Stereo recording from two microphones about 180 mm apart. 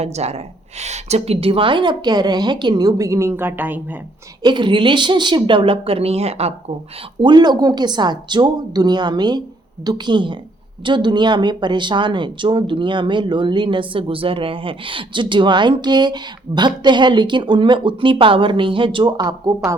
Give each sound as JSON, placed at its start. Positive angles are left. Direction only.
{"t": 0.0, "sound": "a woman's voice", "side_deg": -35}
{"t": 4.4, "sound": "a woman's voice", "side_deg": -25}
{"t": 7.2, "sound": "a woman's voice", "side_deg": -25}